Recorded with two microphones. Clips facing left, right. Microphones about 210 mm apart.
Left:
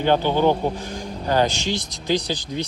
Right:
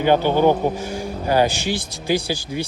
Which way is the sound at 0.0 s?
10° right (ahead or behind).